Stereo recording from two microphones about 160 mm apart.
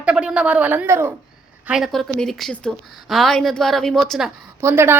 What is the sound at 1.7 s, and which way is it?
A woman's voice, 5° right (ahead or behind).